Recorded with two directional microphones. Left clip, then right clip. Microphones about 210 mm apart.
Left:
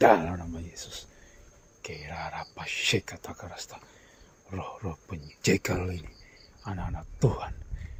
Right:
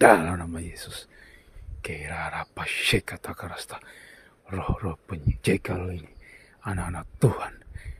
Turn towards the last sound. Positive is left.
turn(degrees=-30)  # may be behind; listen again after turning